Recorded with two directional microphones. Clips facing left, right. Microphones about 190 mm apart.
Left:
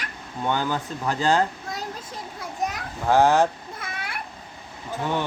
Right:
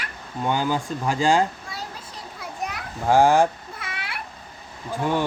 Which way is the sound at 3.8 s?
45° left (ahead or behind).